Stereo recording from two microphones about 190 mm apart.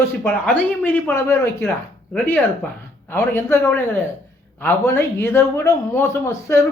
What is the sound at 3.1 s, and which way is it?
A man's voice, 10° left (ahead or behind).